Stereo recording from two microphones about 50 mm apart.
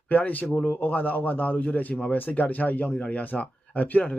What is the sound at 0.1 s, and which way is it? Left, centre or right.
A man's voice, left.